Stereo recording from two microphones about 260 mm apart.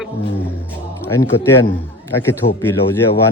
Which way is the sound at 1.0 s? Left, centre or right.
Centre.